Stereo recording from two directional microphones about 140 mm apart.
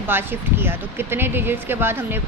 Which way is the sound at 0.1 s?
15° right (ahead or behind).